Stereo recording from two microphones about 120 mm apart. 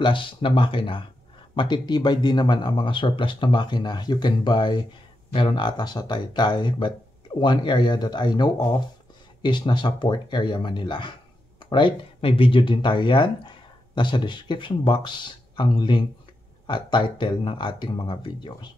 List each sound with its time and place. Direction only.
0.0 s speech: 45° left (ahead or behind)